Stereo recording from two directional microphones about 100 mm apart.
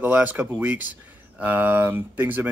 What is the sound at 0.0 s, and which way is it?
Speech, 15° right (ahead or behind).